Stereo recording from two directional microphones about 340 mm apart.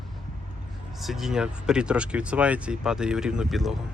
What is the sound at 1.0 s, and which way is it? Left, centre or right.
Speech, centre.